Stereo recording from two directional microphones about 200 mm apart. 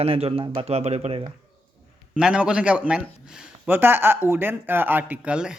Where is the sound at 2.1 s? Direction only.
5° right (ahead or behind).